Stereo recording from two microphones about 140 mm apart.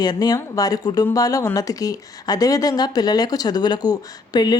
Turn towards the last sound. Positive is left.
turn(degrees=30)  # may be behind; listen again after turning